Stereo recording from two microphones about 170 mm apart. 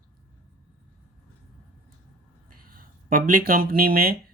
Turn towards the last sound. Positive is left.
turn(degrees=-60)  # may be behind; listen again after turning